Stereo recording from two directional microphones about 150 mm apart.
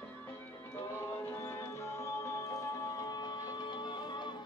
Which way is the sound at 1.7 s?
20° left (ahead or behind).